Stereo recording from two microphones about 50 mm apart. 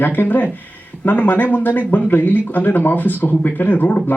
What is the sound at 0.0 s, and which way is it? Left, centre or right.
Speech, left.